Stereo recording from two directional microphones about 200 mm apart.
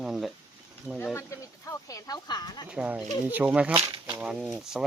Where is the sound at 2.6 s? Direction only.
5° right (ahead or behind).